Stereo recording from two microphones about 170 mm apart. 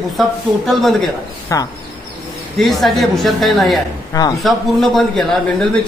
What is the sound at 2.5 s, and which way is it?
A man's voice, centre (ahead or behind).